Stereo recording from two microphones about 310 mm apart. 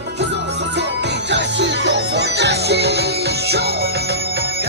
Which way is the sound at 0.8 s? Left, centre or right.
Right.